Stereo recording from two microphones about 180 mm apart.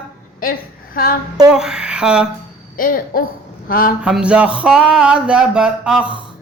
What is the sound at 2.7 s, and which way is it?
A woman's voice, 50° left (ahead or behind).